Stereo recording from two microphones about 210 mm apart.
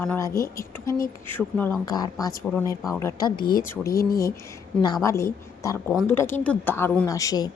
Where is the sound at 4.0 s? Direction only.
45° left (ahead or behind).